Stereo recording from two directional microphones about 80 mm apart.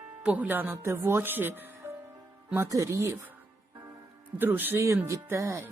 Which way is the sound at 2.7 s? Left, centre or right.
Right.